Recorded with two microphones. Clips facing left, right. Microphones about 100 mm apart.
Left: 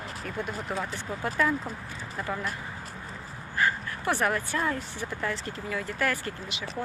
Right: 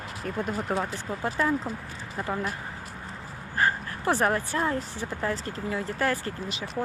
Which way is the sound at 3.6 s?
35° right (ahead or behind).